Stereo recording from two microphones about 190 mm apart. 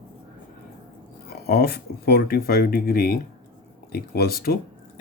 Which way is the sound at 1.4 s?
55° left (ahead or behind).